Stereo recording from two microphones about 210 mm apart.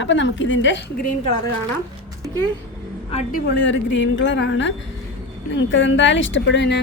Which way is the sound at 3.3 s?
55° left (ahead or behind).